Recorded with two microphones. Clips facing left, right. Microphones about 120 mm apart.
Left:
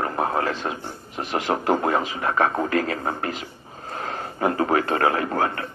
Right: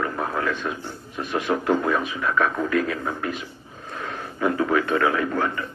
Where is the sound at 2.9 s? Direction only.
55° left (ahead or behind).